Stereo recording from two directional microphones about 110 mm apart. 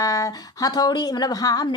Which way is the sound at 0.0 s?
30° left (ahead or behind).